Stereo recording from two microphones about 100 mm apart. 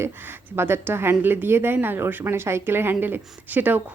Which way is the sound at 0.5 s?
25° right (ahead or behind).